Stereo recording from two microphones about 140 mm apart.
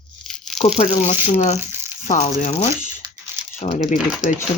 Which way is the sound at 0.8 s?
55° left (ahead or behind).